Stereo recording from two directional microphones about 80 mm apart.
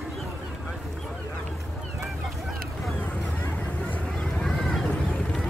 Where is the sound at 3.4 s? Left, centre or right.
Left.